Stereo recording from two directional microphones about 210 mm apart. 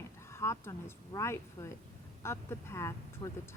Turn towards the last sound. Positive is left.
turn(degrees=15)  # may be behind; listen again after turning